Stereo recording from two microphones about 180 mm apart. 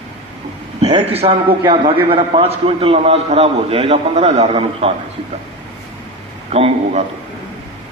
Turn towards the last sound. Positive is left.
turn(degrees=-35)  # may be behind; listen again after turning